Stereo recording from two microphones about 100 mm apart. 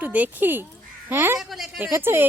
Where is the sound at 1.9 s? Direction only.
25° right (ahead or behind).